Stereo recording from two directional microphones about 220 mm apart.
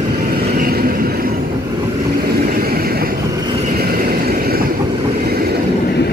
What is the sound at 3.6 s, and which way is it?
Vehicle, 40° right (ahead or behind).